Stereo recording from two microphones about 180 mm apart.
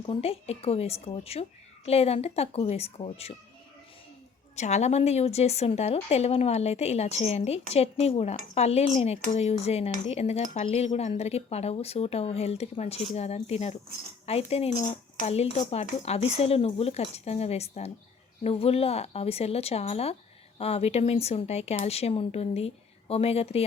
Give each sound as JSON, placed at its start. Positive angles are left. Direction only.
{"t": 0.0, "sound": "speech", "side_deg": 30}
{"t": 4.5, "sound": "speech", "side_deg": 40}